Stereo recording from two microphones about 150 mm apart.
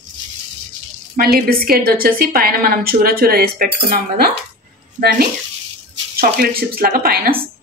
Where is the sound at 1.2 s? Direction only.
90° right.